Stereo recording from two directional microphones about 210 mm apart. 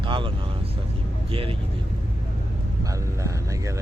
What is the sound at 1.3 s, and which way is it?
Speech, 25° right (ahead or behind).